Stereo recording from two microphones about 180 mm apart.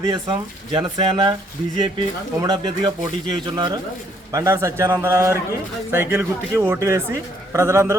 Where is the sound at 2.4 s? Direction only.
25° right (ahead or behind).